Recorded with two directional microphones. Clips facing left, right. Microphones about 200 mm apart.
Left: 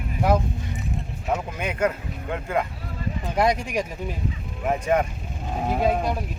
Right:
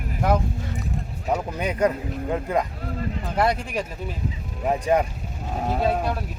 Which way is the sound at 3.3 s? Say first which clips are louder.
Left 1 dB; 10° left (ahead or behind).